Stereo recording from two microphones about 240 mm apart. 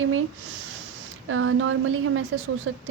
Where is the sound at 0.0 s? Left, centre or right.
Right.